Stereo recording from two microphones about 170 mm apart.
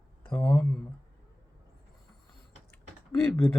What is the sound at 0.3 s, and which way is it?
Speech, 10° left (ahead or behind).